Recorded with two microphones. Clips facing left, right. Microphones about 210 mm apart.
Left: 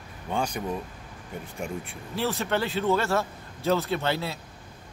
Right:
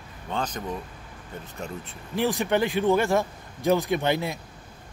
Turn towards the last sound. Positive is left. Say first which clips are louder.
# right 3 dB
turn(degrees=-15)  # may be behind; listen again after turning